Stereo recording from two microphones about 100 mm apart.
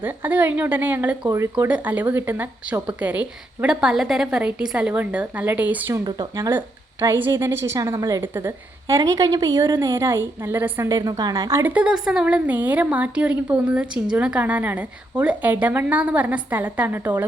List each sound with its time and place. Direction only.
0.0 s a woman's voice: 15° right (ahead or behind)
6.1 s speech: 45° right (ahead or behind)
7.2 s a woman's voice: 25° right (ahead or behind)
9.0 s speech: 40° right (ahead or behind)
9.7 s a woman's voice: 30° right (ahead or behind)
10.8 s speech: 35° right (ahead or behind)
11.5 s a woman's voice: 15° right (ahead or behind)